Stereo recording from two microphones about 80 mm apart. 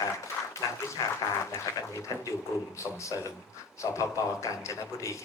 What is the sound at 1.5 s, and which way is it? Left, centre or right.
Speech, left.